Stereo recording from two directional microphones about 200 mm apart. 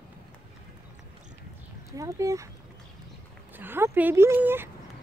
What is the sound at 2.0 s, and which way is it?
Speech, 15° right (ahead or behind).